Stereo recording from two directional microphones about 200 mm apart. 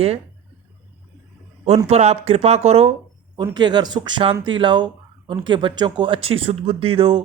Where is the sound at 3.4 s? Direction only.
20° right (ahead or behind).